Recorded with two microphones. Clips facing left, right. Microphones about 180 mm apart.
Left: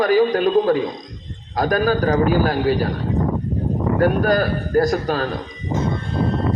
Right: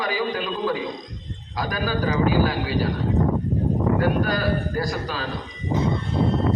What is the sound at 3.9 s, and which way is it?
A man's voice, 50° left (ahead or behind).